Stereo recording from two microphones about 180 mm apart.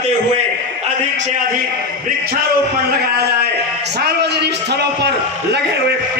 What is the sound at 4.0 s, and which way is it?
Speech, 65° right (ahead or behind).